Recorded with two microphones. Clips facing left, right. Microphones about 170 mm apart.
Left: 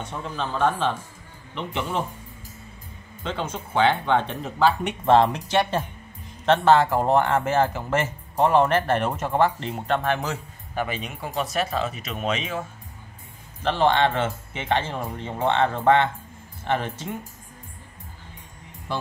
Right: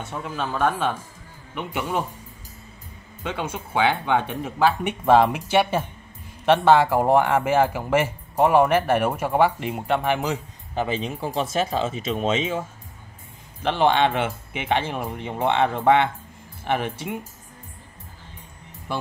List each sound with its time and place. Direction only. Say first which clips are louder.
0.0 s speech: right 1 dB; 5° right (ahead or behind)
3.3 s speech: right 1 dB; 10° right (ahead or behind)
10.7 s speech: right 3 dB; 25° right (ahead or behind)
13.6 s speech: right 1 dB; 15° right (ahead or behind)